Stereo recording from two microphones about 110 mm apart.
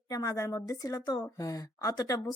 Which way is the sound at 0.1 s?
30° left (ahead or behind).